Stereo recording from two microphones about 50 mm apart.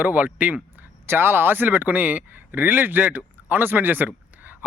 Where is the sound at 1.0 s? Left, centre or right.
Right.